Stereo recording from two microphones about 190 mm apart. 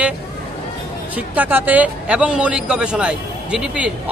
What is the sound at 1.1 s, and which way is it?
A man's voice, 10° right (ahead or behind).